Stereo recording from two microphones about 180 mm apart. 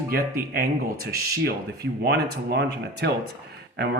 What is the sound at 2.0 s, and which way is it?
Speech, 65° right (ahead or behind).